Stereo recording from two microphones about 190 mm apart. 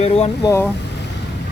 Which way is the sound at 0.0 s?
30° left (ahead or behind).